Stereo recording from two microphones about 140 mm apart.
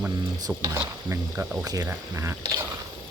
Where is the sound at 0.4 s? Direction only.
25° right (ahead or behind).